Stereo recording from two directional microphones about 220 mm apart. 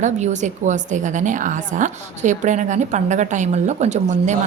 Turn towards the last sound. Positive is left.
turn(degrees=-30)  # may be behind; listen again after turning